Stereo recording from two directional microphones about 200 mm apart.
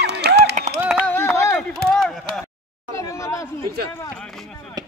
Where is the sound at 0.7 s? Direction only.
10° right (ahead or behind).